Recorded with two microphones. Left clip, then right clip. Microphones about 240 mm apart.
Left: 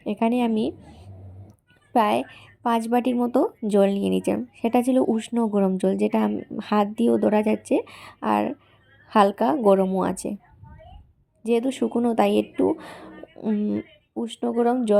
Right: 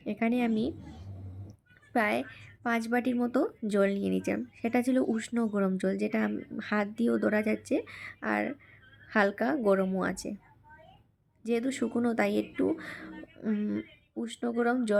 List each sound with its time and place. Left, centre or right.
0.0 s a woman's voice: centre
11.4 s a woman's voice: centre